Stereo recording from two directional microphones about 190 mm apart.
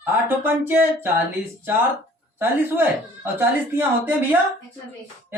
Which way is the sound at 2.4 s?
10° right (ahead or behind).